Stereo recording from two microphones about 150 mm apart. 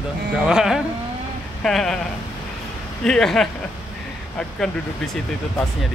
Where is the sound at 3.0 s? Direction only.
5° left (ahead or behind).